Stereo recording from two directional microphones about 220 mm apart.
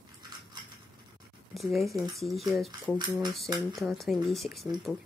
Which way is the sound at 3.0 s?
20° right (ahead or behind).